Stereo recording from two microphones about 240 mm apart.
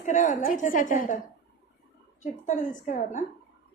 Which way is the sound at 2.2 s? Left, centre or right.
Left.